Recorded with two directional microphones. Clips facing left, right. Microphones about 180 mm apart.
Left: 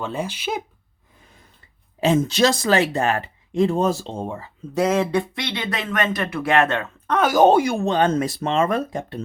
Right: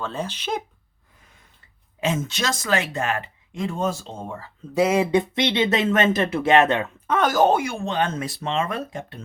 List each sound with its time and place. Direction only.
0.0 s speech: 10° left (ahead or behind)
2.0 s speech: 35° left (ahead or behind)
4.7 s speech: 5° right (ahead or behind)
7.3 s speech: 15° left (ahead or behind)
7.5 s speech: 35° left (ahead or behind)